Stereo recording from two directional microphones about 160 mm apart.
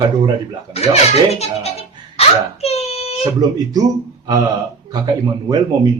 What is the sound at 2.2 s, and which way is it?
Wail, 40° left (ahead or behind).